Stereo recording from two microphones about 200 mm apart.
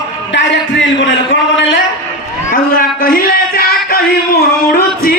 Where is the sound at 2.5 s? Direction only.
45° left (ahead or behind).